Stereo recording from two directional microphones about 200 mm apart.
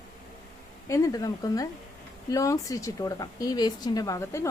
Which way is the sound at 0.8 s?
15° left (ahead or behind).